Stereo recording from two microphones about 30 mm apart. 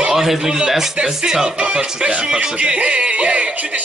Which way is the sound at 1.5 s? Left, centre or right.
Right.